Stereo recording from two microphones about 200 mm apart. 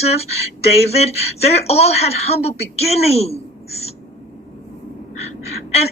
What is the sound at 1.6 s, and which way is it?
Speech, 30° left (ahead or behind).